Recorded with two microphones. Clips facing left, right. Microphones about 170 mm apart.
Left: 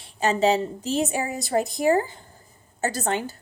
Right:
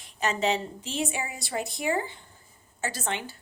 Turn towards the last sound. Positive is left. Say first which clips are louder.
# left 7 dB
turn(degrees=40)  # may be behind; listen again after turning